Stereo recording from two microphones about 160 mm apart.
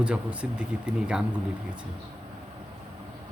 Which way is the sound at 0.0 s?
5° right (ahead or behind).